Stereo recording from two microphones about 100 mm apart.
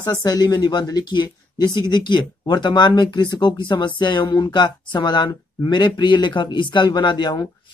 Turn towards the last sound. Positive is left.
turn(degrees=40)  # may be behind; listen again after turning